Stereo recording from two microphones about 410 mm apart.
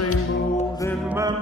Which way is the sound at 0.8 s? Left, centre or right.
Centre.